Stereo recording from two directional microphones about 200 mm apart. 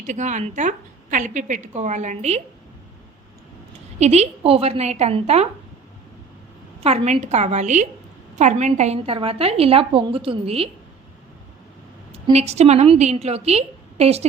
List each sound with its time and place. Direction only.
0.0 s a woman's voice: 35° right (ahead or behind)
4.0 s a woman's voice: 35° right (ahead or behind)
6.8 s a woman's voice: 35° right (ahead or behind)
12.1 s a woman's voice: 35° right (ahead or behind)